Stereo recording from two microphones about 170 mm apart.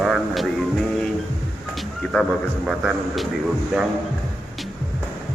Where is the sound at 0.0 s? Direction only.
Centre (ahead or behind).